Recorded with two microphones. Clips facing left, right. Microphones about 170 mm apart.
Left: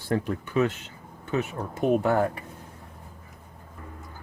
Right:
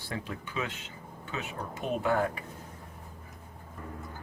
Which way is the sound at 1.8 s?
50° left (ahead or behind).